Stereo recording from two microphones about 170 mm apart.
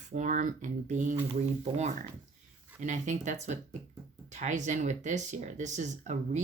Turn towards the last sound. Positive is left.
turn(degrees=-45)  # may be behind; listen again after turning